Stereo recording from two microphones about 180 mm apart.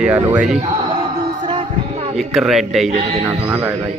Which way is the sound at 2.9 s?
35° right (ahead or behind).